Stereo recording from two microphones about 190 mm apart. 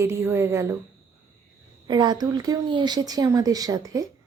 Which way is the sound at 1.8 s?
20° right (ahead or behind).